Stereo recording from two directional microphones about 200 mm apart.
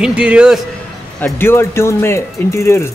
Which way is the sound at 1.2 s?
10° left (ahead or behind).